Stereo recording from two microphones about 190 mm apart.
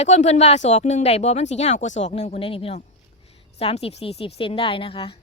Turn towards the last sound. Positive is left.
turn(degrees=30)  # may be behind; listen again after turning